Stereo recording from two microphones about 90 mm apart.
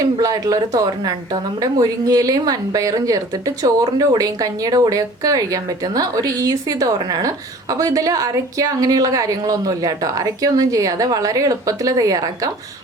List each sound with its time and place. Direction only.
0.0 s a woman's voice: 40° right (ahead or behind)